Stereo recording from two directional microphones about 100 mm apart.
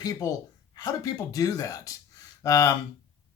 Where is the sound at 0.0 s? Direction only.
35° left (ahead or behind).